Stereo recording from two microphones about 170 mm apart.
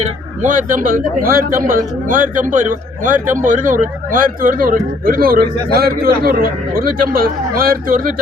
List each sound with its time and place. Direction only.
0.0 s a man's voice: 50° right (ahead or behind)